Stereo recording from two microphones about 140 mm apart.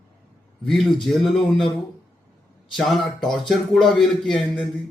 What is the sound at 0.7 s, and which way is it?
Speech, centre (ahead or behind).